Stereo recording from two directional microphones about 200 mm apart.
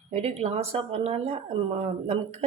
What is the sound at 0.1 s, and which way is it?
A woman's voice, 30° right (ahead or behind).